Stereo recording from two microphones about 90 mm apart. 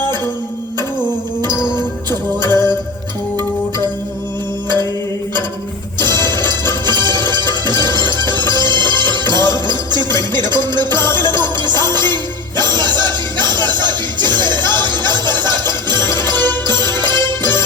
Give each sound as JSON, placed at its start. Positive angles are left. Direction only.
{"t": 0.8, "sound": "music", "side_deg": -50}
{"t": 6.0, "sound": "music", "side_deg": -55}